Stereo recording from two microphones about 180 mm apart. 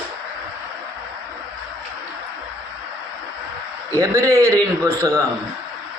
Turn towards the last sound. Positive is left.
turn(degrees=-15)  # may be behind; listen again after turning